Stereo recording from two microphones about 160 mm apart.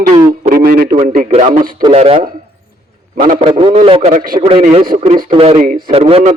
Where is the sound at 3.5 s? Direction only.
35° right (ahead or behind).